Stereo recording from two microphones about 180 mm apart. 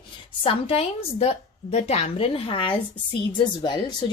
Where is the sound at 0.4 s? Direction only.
35° left (ahead or behind).